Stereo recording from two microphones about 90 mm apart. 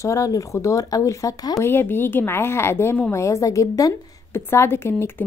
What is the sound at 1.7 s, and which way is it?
Speech, 25° left (ahead or behind).